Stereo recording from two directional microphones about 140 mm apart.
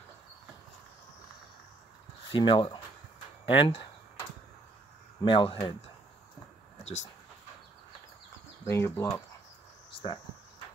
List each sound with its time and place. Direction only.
2.3 s speech: 40° left (ahead or behind)
5.2 s speech: 35° left (ahead or behind)
6.8 s a sound: 55° left (ahead or behind)
8.6 s speech: 20° left (ahead or behind)